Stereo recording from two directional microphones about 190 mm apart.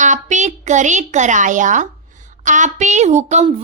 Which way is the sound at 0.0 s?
40° right (ahead or behind).